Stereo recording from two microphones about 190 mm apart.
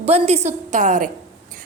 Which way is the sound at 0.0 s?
35° right (ahead or behind).